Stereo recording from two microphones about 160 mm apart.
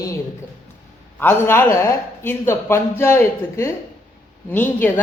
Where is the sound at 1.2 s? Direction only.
15° left (ahead or behind).